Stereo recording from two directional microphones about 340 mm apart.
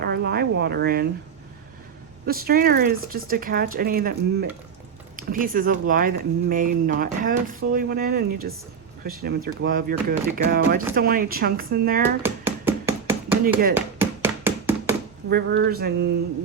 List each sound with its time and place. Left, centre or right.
0.0 s speech: right
2.2 s speech: right
12.2 s a sound: centre
15.3 s speech: right